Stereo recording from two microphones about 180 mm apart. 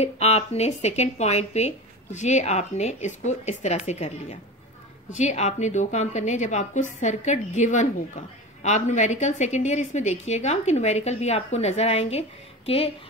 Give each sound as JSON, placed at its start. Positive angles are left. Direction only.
{"t": 0.0, "sound": "a woman's voice", "side_deg": 35}